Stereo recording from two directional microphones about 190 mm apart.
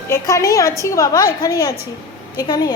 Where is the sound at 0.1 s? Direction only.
15° left (ahead or behind).